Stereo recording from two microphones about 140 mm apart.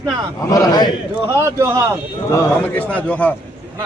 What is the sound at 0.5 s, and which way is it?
Speech, 25° left (ahead or behind).